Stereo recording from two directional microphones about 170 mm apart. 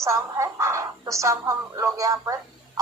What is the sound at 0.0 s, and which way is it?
A woman's voice, 15° right (ahead or behind).